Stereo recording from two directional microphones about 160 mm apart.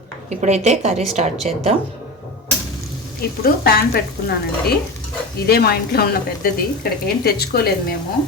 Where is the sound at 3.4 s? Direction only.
70° left (ahead or behind).